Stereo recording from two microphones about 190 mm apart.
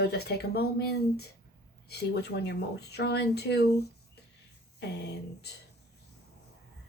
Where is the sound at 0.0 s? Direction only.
60° left (ahead or behind).